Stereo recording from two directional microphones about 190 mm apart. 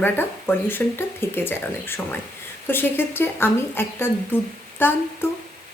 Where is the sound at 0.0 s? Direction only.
10° left (ahead or behind).